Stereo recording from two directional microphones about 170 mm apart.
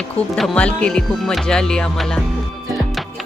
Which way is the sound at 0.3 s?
5° left (ahead or behind).